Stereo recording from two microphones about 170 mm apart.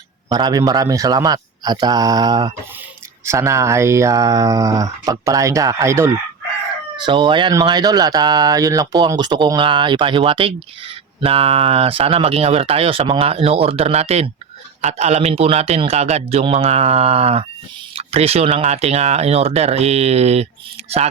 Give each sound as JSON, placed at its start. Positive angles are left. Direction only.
{"t": 0.3, "sound": "speech", "side_deg": -25}
{"t": 6.9, "sound": "speech", "side_deg": -30}